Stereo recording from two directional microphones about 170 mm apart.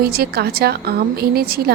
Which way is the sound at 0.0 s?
65° right (ahead or behind).